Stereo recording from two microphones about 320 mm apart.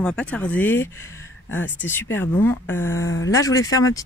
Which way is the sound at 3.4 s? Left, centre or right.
Centre.